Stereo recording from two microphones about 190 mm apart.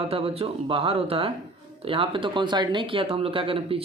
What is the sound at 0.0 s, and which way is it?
Speech, 30° right (ahead or behind).